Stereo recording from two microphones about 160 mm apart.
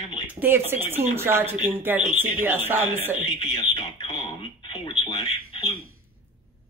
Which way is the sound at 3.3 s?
25° left (ahead or behind).